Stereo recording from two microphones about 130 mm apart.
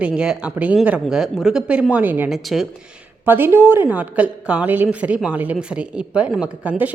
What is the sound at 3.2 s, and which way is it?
Speech, 15° right (ahead or behind).